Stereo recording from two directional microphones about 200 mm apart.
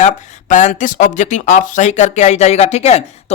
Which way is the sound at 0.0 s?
40° left (ahead or behind).